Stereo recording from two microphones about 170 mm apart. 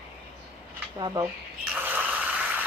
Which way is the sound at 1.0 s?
25° right (ahead or behind).